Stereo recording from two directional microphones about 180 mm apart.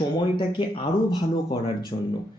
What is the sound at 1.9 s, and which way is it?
Speech, 35° left (ahead or behind).